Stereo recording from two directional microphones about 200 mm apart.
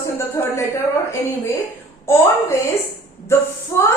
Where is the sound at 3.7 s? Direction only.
15° left (ahead or behind).